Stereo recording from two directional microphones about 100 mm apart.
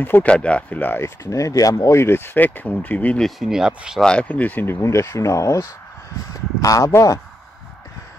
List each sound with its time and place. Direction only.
0.0 s speech: 15° left (ahead or behind)
3.3 s speech: 5° right (ahead or behind)
4.0 s speech: 10° left (ahead or behind)
4.8 s speech: 30° left (ahead or behind)